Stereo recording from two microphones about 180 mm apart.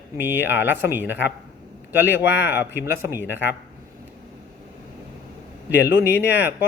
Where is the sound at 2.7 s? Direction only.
10° right (ahead or behind).